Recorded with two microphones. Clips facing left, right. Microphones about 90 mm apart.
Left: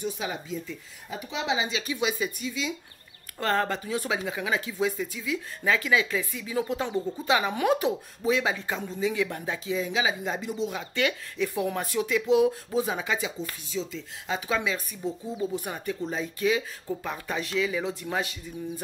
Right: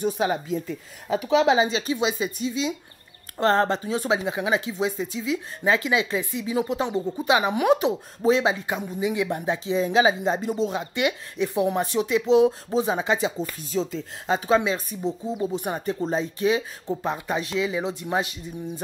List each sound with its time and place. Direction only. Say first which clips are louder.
0.0 s speech: right 8 dB; 50° right (ahead or behind)
1.2 s speech: right 14 dB; 75° right (ahead or behind)
1.5 s speech: right 7 dB; 40° right (ahead or behind)
9.8 s speech: right 9 dB; 40° right (ahead or behind)
10.2 s speech: right 6 dB; 30° right (ahead or behind)